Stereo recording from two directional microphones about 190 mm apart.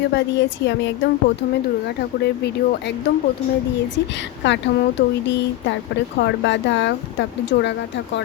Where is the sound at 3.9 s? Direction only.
70° left (ahead or behind).